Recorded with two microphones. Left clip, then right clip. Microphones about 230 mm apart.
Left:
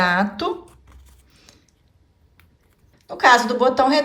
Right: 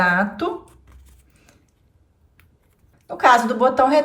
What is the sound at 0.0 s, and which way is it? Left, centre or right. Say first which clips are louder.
Speech: right 1 dB; centre.